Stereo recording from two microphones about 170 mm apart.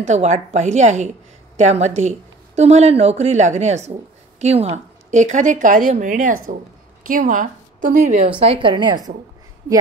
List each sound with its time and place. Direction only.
0.0 s a woman's voice: 45° right (ahead or behind)
8.5 s a woman's voice: 30° right (ahead or behind)